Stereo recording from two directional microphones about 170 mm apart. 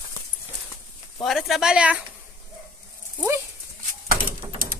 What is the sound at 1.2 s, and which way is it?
Speech, centre (ahead or behind).